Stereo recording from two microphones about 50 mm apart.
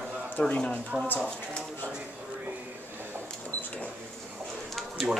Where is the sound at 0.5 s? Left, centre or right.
Left.